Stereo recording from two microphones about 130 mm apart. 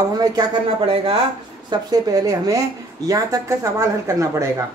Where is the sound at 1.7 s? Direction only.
30° right (ahead or behind).